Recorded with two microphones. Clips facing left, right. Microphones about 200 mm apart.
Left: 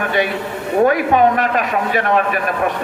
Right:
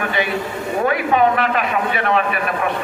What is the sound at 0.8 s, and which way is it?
A man's voice, 45° left (ahead or behind).